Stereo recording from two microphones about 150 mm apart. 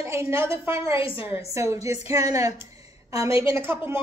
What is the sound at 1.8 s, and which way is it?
A woman's voice, 20° right (ahead or behind).